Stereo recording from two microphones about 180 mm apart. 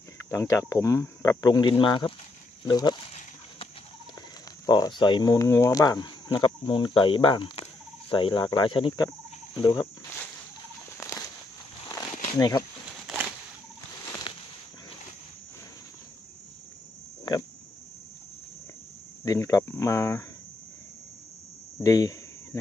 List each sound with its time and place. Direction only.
0.3 s speech: 15° left (ahead or behind)
4.6 s speech: 25° left (ahead or behind)
12.4 s speech: 20° left (ahead or behind)
14.3 s a sound: 25° left (ahead or behind)
17.3 s pig: 20° left (ahead or behind)
19.2 s speech: 20° left (ahead or behind)
21.7 s a sound: 20° left (ahead or behind)